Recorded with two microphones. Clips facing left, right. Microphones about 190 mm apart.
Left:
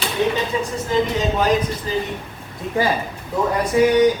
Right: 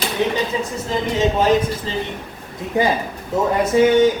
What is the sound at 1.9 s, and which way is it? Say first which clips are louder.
Speech: left 2 dB; 25° right (ahead or behind).